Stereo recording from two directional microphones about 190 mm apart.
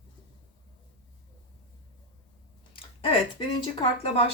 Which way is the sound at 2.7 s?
30° left (ahead or behind).